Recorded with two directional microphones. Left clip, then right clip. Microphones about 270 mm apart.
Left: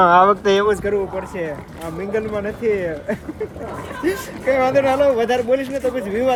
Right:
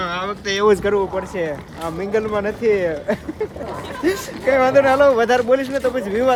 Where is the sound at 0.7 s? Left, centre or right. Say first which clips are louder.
Right 3 dB; right.